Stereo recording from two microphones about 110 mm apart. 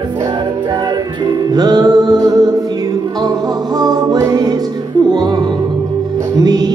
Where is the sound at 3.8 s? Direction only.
35° right (ahead or behind).